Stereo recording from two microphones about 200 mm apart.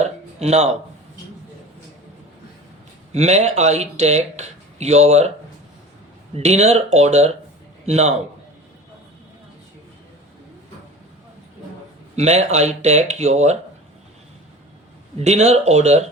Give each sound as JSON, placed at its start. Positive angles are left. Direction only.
{"t": 0.0, "sound": "a sound", "side_deg": -35}
{"t": 3.1, "sound": "speech", "side_deg": -35}
{"t": 6.3, "sound": "speech", "side_deg": -35}
{"t": 12.1, "sound": "speech", "side_deg": -35}
{"t": 15.2, "sound": "speech", "side_deg": -35}